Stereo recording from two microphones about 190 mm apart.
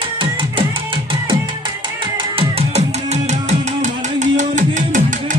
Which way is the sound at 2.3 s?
35° right (ahead or behind).